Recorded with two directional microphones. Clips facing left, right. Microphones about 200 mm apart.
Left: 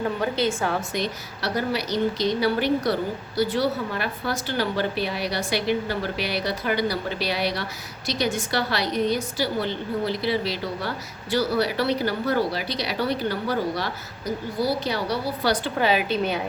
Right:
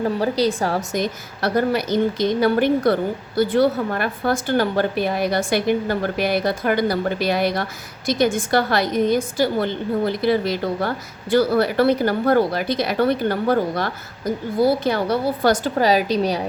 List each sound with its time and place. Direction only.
0.0 s a woman's voice: 35° right (ahead or behind)